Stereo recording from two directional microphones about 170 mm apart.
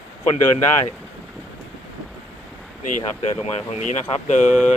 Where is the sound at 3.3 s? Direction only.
45° left (ahead or behind).